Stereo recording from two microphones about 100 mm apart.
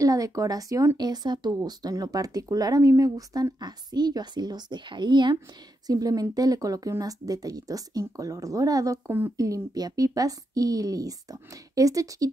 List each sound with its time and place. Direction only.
0.0 s a woman's voice: 35° right (ahead or behind); by 5.4 s 50° right (ahead or behind)
5.9 s speech: 40° right (ahead or behind)